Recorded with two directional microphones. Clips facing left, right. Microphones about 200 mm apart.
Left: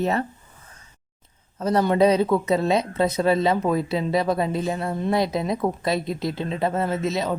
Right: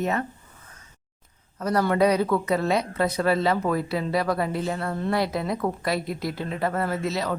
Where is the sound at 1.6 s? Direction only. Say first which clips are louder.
Left 3 dB; 25° left (ahead or behind).